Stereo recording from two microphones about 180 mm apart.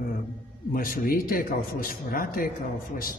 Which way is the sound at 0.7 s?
50° left (ahead or behind).